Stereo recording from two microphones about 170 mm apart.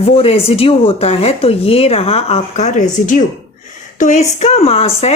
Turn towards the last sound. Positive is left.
turn(degrees=35)  # may be behind; listen again after turning